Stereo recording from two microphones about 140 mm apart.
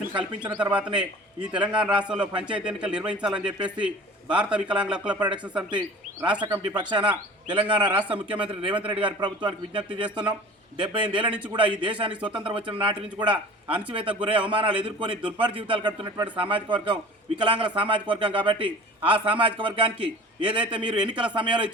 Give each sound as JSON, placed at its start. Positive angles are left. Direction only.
{"t": 1.5, "sound": "a man's voice", "side_deg": -10}
{"t": 6.4, "sound": "a man's voice", "side_deg": -35}